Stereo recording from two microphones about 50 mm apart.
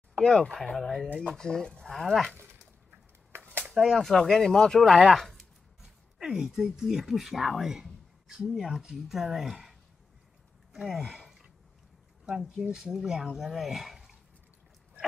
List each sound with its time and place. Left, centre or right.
0.2 s speech: centre
3.3 s a sound: right
3.8 s speech: centre
6.1 s speech: centre
10.9 s a sound: centre
12.3 s speech: centre